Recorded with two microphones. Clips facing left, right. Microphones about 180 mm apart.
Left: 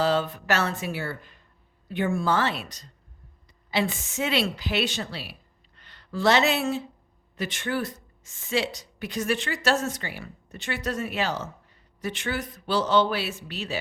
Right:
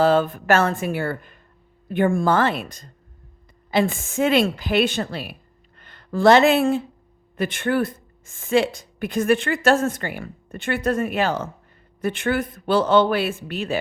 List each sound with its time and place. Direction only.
0.0 s speech: 50° right (ahead or behind)